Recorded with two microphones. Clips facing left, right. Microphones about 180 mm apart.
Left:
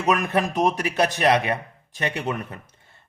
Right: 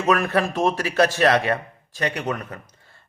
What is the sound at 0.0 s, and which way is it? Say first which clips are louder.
A man's voice: right 2 dB; 20° left (ahead or behind).